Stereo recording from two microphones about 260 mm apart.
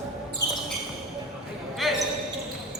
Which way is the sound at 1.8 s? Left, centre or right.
Centre.